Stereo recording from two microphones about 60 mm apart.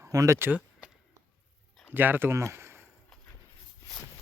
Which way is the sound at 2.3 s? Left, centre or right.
Right.